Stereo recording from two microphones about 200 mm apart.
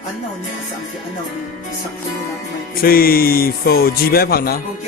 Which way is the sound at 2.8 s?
50° left (ahead or behind).